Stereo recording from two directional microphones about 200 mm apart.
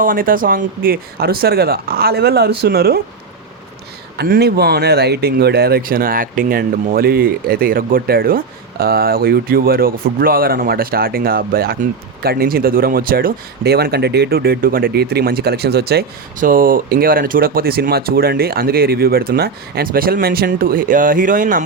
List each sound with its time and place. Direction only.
0.0 s speech: 45° right (ahead or behind)
4.2 s speech: 55° right (ahead or behind)